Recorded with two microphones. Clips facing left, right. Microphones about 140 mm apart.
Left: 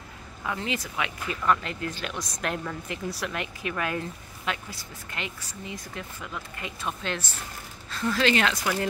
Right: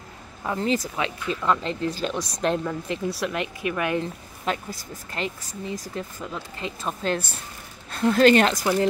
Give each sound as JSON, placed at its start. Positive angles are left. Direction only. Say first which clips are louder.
{"t": 0.5, "sound": "speech", "louder": "right 7 dB", "side_deg": -35}
{"t": 4.5, "sound": "speech", "louder": "right 5 dB", "side_deg": -40}
{"t": 7.9, "sound": "speech", "louder": "right 8 dB", "side_deg": -50}